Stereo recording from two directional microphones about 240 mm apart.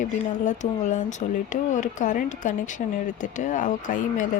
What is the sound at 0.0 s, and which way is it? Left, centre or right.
Speech, left.